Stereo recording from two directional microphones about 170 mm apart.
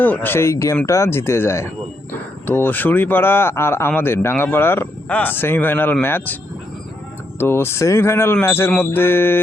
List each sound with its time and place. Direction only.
0.0 s speech: 10° left (ahead or behind)
7.3 s speech: 15° left (ahead or behind)